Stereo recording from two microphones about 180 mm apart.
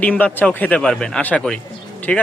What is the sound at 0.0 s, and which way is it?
Speech, 10° left (ahead or behind).